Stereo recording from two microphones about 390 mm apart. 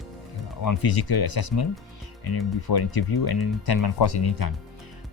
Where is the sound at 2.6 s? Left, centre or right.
Left.